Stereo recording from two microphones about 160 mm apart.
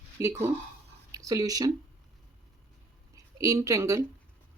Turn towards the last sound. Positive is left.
turn(degrees=-20)  # may be behind; listen again after turning